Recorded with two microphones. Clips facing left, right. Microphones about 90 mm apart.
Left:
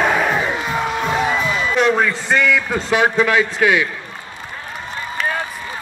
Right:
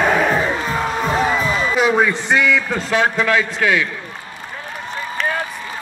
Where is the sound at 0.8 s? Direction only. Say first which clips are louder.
Right 1 dB; centre (ahead or behind).